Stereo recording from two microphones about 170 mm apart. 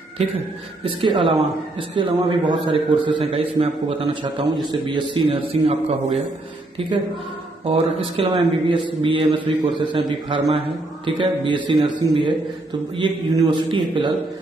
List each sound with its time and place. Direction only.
0.8 s a man's voice: 30° right (ahead or behind)